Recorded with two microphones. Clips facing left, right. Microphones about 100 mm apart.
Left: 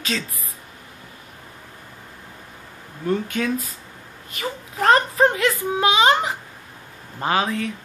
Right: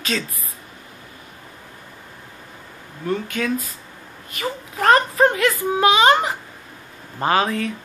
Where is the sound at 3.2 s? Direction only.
20° left (ahead or behind).